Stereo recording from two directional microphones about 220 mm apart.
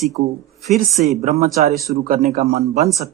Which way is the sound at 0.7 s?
Centre (ahead or behind).